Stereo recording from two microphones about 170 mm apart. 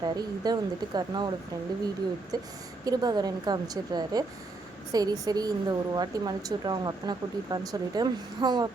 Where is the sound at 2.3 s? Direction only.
25° right (ahead or behind).